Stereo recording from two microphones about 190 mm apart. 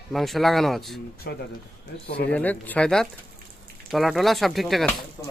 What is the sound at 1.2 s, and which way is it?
Speech, 55° left (ahead or behind).